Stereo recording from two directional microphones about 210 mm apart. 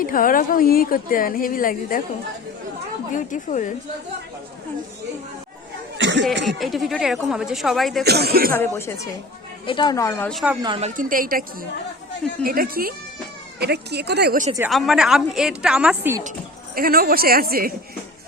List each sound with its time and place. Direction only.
0.0 s a woman's voice: 40° left (ahead or behind)
3.2 s a woman's voice: 35° left (ahead or behind)
6.0 s a sound: 60° right (ahead or behind)
6.4 s a woman's voice: centre (ahead or behind)
8.0 s speech: 50° right (ahead or behind)
8.5 s speech: 10° left (ahead or behind)
10.6 s speech: 25° right (ahead or behind); by 14.4 s 50° right (ahead or behind)
14.7 s a woman's voice: centre (ahead or behind)
16.7 s speech: 45° right (ahead or behind)